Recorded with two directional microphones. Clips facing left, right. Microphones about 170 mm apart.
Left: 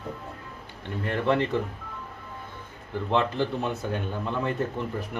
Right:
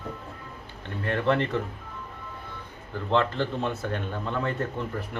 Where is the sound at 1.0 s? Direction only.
15° left (ahead or behind).